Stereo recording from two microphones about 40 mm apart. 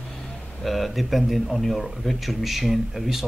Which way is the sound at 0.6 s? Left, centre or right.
Centre.